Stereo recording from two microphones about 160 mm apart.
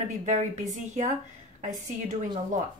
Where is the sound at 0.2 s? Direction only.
45° right (ahead or behind).